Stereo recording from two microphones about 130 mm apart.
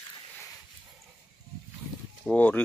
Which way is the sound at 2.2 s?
10° left (ahead or behind).